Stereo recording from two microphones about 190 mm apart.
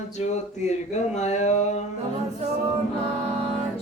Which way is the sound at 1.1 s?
35° left (ahead or behind).